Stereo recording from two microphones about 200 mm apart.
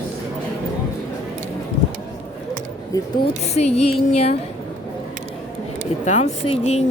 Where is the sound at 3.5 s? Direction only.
30° left (ahead or behind).